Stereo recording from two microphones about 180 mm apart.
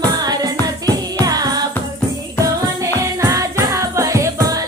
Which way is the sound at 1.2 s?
20° right (ahead or behind).